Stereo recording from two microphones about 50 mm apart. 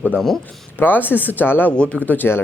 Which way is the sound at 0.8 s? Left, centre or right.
Left.